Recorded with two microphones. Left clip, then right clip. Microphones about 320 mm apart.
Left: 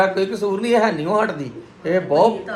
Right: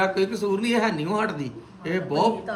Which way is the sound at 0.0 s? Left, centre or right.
Centre.